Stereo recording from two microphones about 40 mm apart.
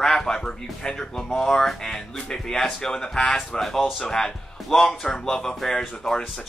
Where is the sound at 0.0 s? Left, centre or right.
Centre.